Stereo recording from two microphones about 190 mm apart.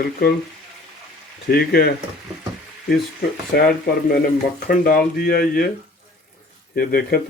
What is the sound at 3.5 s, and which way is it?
Speech, 55° left (ahead or behind).